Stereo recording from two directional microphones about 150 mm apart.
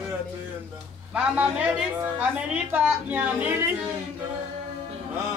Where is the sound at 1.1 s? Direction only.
5° right (ahead or behind).